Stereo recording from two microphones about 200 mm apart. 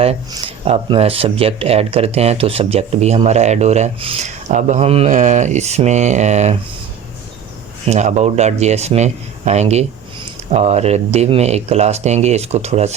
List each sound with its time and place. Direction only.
0.3 s speech: 25° right (ahead or behind)
7.9 s speech: 35° right (ahead or behind)